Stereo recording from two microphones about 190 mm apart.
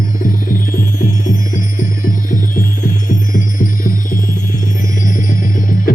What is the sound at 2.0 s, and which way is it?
Music, 45° left (ahead or behind).